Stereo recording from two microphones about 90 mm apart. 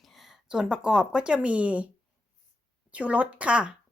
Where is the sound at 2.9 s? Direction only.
15° right (ahead or behind).